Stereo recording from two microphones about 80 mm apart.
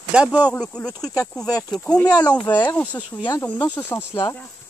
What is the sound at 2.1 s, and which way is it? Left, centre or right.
Speech, left.